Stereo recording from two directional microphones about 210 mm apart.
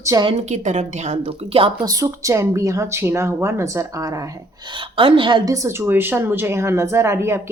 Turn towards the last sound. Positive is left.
turn(degrees=-10)  # may be behind; listen again after turning